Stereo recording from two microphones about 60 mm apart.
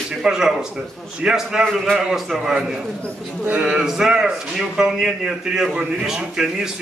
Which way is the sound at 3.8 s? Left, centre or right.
Centre.